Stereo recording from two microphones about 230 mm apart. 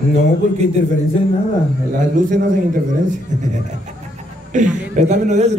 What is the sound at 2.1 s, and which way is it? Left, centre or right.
A man's voice, right.